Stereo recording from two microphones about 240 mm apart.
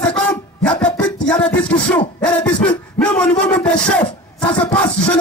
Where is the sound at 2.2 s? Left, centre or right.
Centre.